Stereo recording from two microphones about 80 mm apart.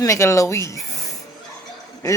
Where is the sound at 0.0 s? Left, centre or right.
Left.